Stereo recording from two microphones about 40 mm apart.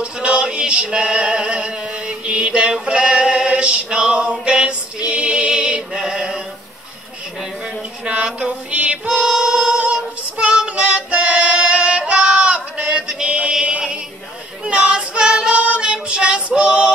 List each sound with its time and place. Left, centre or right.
0.0 s music: right
8.0 s a sound: right
8.5 s music: right
14.6 s child singing: right